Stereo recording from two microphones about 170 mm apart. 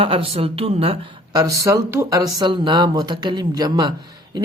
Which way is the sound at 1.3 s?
20° right (ahead or behind).